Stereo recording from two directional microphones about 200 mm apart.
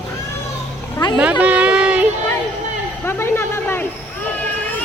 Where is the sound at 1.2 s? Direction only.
5° right (ahead or behind).